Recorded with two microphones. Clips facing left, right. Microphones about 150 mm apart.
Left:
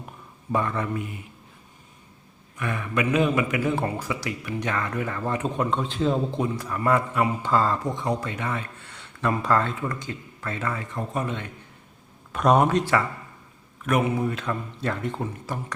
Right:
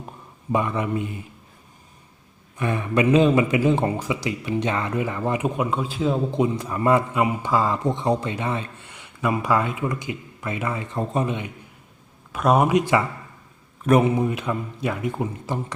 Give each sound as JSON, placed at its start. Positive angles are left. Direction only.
{"t": 0.5, "sound": "speech", "side_deg": -15}
{"t": 2.6, "sound": "speech", "side_deg": -30}
{"t": 6.3, "sound": "speech", "side_deg": -20}
{"t": 7.9, "sound": "speech", "side_deg": -25}
{"t": 12.3, "sound": "speech", "side_deg": -5}
{"t": 13.8, "sound": "a man's voice", "side_deg": -30}
{"t": 14.2, "sound": "speech", "side_deg": -15}